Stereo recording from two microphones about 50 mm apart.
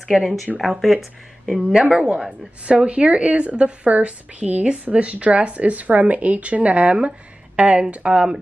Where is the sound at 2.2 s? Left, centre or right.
Right.